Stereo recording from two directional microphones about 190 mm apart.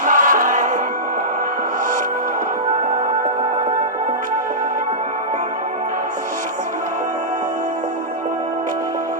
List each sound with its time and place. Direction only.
0.0 s music: 45° right (ahead or behind)